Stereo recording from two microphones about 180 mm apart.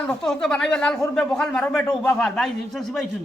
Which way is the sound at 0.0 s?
5° left (ahead or behind).